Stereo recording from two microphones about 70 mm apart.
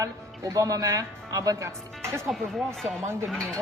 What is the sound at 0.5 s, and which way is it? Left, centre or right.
Speech, right.